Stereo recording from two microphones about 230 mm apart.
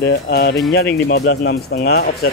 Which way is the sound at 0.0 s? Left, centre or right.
Left.